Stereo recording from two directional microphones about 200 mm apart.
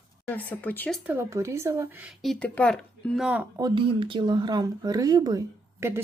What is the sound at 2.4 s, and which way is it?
Speech, 5° left (ahead or behind).